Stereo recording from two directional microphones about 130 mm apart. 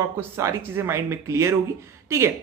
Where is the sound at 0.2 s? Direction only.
20° right (ahead or behind).